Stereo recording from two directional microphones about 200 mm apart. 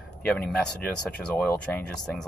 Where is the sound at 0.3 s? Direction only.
5° left (ahead or behind).